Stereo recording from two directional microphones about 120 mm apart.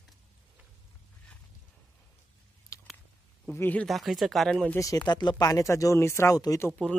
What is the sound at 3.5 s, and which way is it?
Speech, 15° left (ahead or behind).